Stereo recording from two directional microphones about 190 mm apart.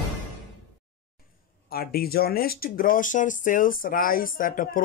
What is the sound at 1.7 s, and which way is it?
Speech, 50° left (ahead or behind).